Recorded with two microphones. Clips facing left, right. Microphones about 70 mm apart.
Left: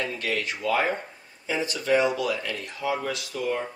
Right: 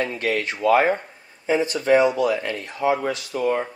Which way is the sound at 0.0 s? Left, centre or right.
Right.